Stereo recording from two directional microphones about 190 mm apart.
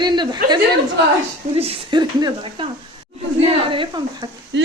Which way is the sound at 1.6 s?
30° right (ahead or behind).